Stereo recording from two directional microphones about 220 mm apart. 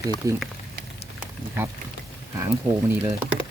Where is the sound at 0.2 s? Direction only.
15° right (ahead or behind).